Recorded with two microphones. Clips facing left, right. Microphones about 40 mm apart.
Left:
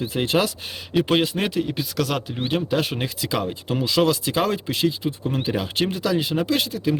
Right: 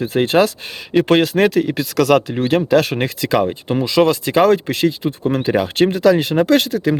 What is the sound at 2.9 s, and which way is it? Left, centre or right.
Speech, right.